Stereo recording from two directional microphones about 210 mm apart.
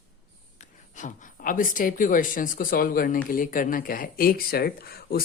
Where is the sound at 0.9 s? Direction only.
35° left (ahead or behind).